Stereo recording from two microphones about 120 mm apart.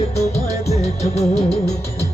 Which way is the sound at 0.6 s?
60° left (ahead or behind).